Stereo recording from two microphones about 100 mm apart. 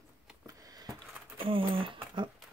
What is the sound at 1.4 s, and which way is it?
Speech, 60° right (ahead or behind).